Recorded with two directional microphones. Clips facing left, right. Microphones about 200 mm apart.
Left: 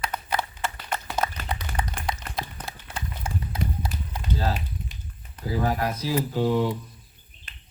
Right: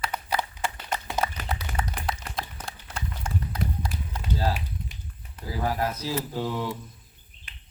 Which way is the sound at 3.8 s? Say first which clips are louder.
Left 1 dB; 5° left (ahead or behind).